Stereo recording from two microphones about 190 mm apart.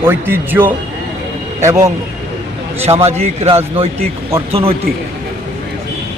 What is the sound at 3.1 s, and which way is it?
A man's voice, 35° right (ahead or behind).